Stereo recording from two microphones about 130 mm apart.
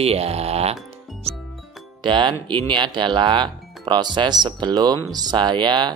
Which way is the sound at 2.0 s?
40° right (ahead or behind).